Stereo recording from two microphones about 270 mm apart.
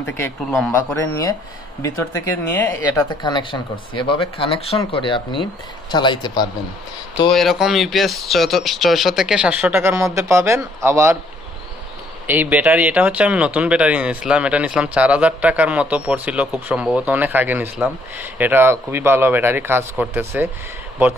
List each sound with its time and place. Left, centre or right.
0.0 s speech: centre
7.3 s speech: centre
12.3 s speech: centre